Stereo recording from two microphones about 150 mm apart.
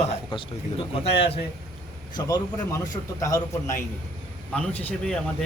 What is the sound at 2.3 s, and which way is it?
Speech, 25° left (ahead or behind).